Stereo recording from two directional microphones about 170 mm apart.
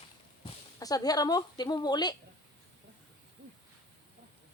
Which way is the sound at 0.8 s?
20° left (ahead or behind).